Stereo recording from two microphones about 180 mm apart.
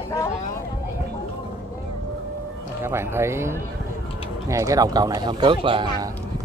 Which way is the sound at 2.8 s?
15° right (ahead or behind).